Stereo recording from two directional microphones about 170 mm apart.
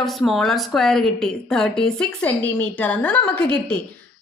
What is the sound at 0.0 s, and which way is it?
A woman's voice, centre (ahead or behind).